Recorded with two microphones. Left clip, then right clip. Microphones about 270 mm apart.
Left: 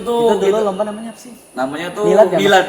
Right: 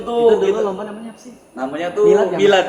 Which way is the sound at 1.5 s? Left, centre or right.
Left.